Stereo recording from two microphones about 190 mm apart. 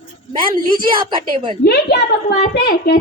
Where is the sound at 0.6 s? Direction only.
50° right (ahead or behind).